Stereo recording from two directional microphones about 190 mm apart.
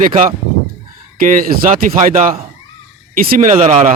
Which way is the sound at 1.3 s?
45° right (ahead or behind).